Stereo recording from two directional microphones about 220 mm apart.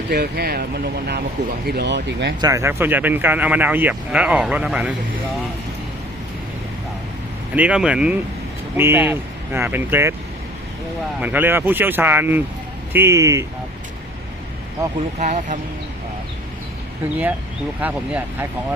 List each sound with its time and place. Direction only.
0.1 s speech: 45° right (ahead or behind)
1.6 s speech: 45° right (ahead or behind)
2.4 s speech: 15° right (ahead or behind)
7.5 s speech: 5° right (ahead or behind)
11.2 s speech: 10° right (ahead or behind)
15.2 s speech: 35° right (ahead or behind)
17.7 s speech: 5° right (ahead or behind)